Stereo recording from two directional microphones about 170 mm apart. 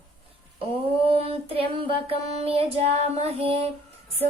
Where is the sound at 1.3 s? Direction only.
35° right (ahead or behind).